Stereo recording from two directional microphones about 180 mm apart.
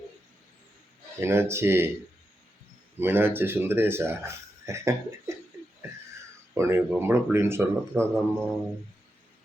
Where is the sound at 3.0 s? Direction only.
10° right (ahead or behind).